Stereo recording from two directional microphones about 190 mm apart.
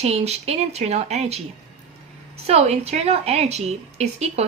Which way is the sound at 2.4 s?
35° right (ahead or behind).